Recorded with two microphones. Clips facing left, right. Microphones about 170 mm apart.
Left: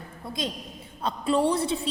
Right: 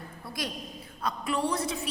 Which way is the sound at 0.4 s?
25° left (ahead or behind).